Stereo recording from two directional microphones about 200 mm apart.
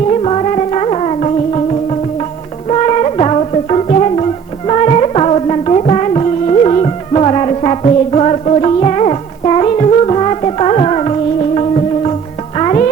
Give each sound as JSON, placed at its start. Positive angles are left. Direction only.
{"t": 0.1, "sound": "music", "side_deg": 30}